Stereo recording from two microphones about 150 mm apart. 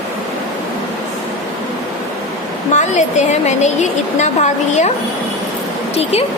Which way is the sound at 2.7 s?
50° left (ahead or behind).